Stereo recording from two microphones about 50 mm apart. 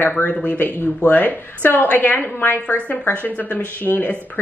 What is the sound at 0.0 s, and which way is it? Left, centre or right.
A woman's voice, left.